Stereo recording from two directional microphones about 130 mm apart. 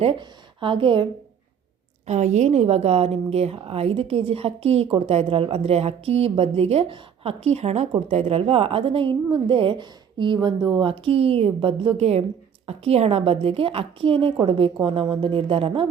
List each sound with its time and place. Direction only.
0.0 s a woman's voice: 45° right (ahead or behind)
2.0 s a woman's voice: 65° right (ahead or behind); by 15.9 s 45° right (ahead or behind)